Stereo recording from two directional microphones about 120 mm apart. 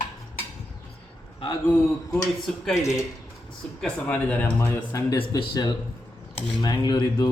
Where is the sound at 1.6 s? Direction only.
25° left (ahead or behind).